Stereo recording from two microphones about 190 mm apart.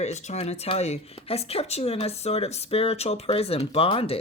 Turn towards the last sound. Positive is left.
turn(degrees=30)  # may be behind; listen again after turning